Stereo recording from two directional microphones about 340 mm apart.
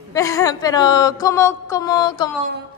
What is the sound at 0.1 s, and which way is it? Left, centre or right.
Speech, centre.